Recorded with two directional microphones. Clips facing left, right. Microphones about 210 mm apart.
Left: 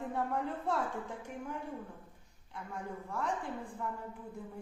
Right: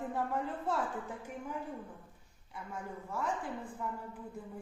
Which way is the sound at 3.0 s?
Centre (ahead or behind).